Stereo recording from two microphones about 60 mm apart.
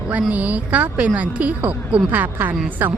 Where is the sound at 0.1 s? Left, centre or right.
Right.